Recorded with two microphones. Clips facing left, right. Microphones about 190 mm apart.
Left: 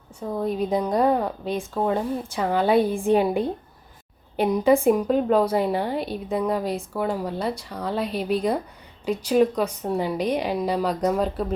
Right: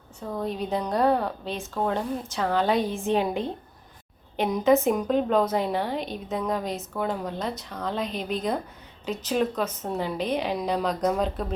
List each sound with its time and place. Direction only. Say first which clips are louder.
0.2 s a woman's voice: left 4 dB; 10° left (ahead or behind)